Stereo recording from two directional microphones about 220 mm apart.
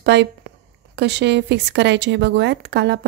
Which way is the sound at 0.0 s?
50° right (ahead or behind).